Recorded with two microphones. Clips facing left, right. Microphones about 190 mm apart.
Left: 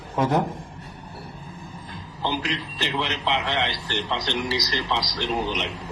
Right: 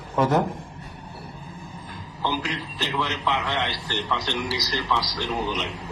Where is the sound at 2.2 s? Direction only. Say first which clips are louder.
Left 1 dB; 20° left (ahead or behind).